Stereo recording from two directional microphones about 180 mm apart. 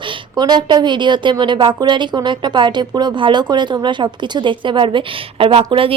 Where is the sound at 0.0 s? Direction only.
25° right (ahead or behind).